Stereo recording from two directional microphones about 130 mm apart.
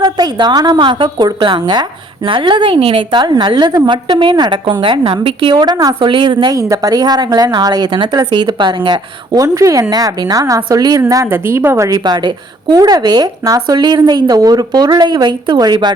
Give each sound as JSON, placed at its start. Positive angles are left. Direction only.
{"t": 0.0, "sound": "a woman's voice", "side_deg": -35}